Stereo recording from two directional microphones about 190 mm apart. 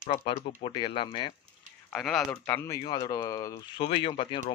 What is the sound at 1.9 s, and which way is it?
Speech, centre (ahead or behind).